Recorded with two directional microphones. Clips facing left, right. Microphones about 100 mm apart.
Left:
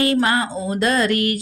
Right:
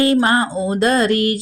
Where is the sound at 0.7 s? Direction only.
30° right (ahead or behind).